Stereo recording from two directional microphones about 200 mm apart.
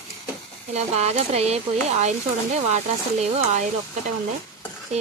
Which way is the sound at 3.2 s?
35° right (ahead or behind).